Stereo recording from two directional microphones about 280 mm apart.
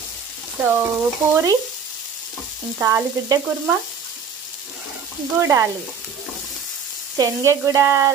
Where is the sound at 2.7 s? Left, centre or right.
Centre.